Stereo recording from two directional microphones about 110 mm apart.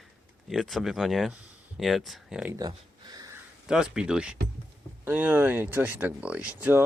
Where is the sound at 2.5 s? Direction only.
35° right (ahead or behind).